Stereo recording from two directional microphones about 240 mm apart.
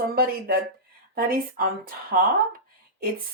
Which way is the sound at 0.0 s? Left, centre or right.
Right.